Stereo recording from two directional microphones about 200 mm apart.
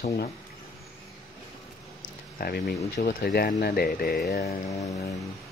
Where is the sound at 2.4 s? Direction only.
50° left (ahead or behind).